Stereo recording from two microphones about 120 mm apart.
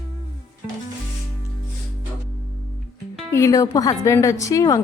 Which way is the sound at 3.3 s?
25° left (ahead or behind).